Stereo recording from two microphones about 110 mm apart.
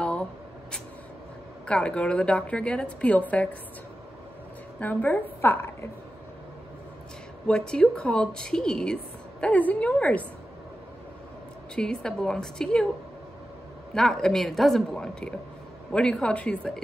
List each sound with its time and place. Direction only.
0.0 s a sound: 10° left (ahead or behind)
1.7 s a woman's voice: 10° left (ahead or behind)
4.7 s a woman's voice: 15° left (ahead or behind)
7.4 s a woman's voice: 5° left (ahead or behind)
11.7 s a woman's voice: 5° left (ahead or behind)
13.9 s a woman's voice: 5° left (ahead or behind)